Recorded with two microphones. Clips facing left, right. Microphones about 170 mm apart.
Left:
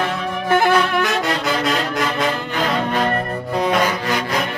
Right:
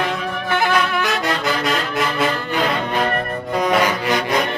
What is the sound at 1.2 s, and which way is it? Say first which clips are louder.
Music: left 1 dB; centre (ahead or behind).